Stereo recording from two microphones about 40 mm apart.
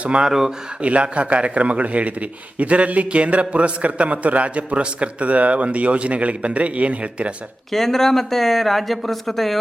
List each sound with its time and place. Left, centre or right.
0.3 s speech: centre
0.8 s a man's voice: right
7.7 s speech: centre